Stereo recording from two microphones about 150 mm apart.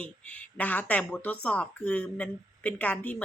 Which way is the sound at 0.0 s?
10° left (ahead or behind).